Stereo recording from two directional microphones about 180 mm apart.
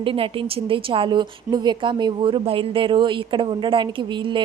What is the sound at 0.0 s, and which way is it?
A woman's voice, 30° right (ahead or behind).